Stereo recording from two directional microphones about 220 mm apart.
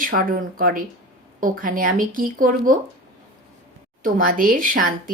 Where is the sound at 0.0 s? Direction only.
40° right (ahead or behind).